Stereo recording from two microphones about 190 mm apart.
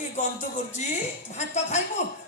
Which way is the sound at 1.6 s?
35° left (ahead or behind).